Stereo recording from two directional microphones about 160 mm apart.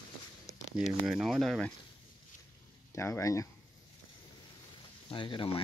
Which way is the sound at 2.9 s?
15° left (ahead or behind).